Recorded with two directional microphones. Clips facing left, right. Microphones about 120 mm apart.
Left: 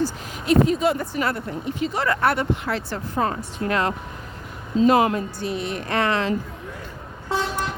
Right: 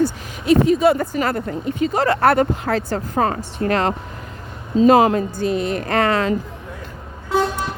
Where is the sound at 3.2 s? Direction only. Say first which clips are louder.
Right 3 dB; 70° right (ahead or behind).